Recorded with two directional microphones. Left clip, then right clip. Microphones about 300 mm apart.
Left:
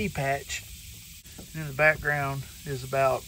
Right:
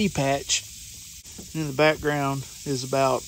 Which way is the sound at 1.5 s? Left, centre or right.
Centre.